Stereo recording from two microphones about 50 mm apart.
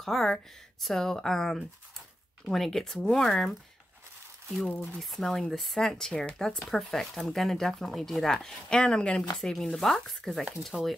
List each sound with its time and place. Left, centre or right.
0.0 s speech: centre
4.9 s chopping: centre
5.9 s speech: centre
6.7 s speech: centre
9.4 s chopping: centre